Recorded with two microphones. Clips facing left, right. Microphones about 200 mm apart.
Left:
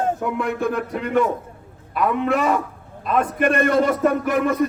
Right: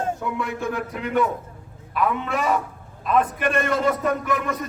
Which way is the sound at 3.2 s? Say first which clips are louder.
Left 7 dB; 50° left (ahead or behind).